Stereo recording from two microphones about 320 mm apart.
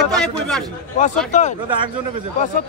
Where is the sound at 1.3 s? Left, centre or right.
Left.